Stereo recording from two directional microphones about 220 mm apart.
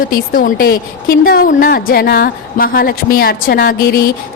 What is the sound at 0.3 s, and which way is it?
A woman's voice, 40° left (ahead or behind).